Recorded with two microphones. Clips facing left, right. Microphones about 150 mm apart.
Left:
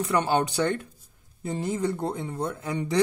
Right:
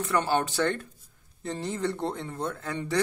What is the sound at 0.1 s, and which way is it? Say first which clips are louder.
Speech: left 1 dB; 15° left (ahead or behind).